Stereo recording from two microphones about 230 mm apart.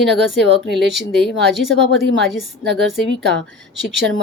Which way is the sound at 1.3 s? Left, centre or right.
Right.